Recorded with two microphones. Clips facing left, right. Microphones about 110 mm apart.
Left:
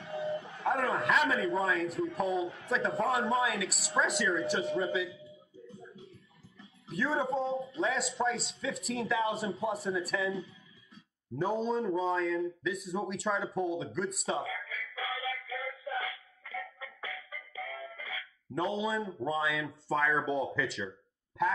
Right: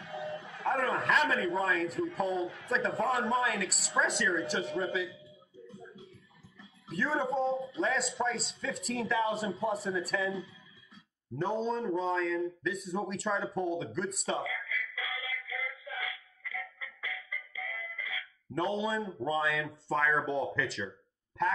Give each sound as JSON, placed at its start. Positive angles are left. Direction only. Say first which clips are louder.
{"t": 0.0, "sound": "a sound", "louder": "left 4 dB", "side_deg": 35}
{"t": 0.6, "sound": "a man's voice", "louder": "right 1 dB", "side_deg": 0}
{"t": 5.7, "sound": "music", "louder": "even", "side_deg": 0}
{"t": 6.6, "sound": "a man's voice", "louder": "even", "side_deg": 0}
{"t": 14.4, "sound": "music", "louder": "right 1 dB", "side_deg": 30}
{"t": 18.5, "sound": "a man's voice", "louder": "even", "side_deg": 0}